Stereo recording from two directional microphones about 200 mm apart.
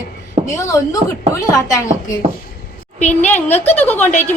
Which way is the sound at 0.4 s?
15° left (ahead or behind).